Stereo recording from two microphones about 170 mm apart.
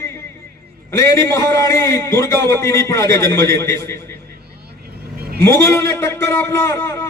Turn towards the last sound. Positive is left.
turn(degrees=15)  # may be behind; listen again after turning